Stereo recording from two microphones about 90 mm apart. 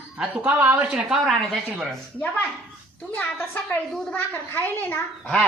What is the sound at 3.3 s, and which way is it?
A woman's voice, 25° left (ahead or behind).